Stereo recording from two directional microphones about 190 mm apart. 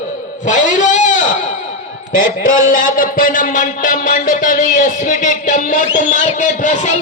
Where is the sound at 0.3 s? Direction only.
40° left (ahead or behind).